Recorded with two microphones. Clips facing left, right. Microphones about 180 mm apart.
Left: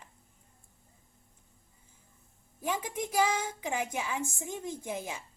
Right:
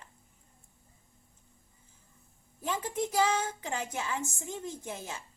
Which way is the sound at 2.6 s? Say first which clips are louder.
Right 1 dB; 15° left (ahead or behind).